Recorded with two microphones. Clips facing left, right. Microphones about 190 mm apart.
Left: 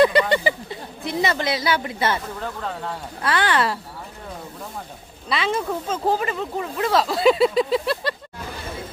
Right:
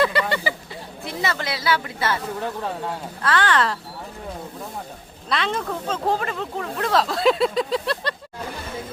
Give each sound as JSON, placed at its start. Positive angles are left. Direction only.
{"t": 0.0, "sound": "a sound", "side_deg": 20}
{"t": 1.0, "sound": "a woman's voice", "side_deg": 20}
{"t": 3.2, "sound": "speech", "side_deg": 10}
{"t": 5.3, "sound": "speech", "side_deg": 5}